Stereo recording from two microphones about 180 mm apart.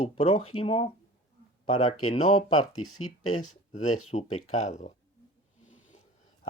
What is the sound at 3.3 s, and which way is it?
Speech, 40° left (ahead or behind).